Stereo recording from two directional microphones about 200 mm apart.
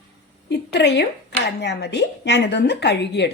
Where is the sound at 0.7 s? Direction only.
60° left (ahead or behind).